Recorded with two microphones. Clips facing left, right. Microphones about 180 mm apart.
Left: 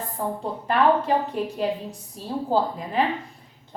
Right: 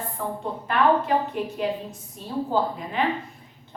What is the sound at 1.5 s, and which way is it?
A woman's voice, 35° left (ahead or behind).